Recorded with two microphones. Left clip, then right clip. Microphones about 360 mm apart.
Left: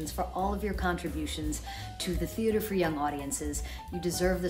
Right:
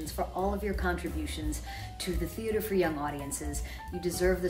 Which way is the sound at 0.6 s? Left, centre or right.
Centre.